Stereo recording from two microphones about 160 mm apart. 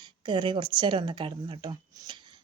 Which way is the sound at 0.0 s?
30° right (ahead or behind).